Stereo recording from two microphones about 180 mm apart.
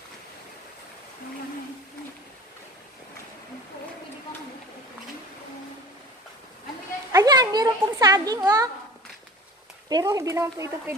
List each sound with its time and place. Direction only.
7.1 s a child's voice: 20° right (ahead or behind)
9.8 s speech: 20° right (ahead or behind)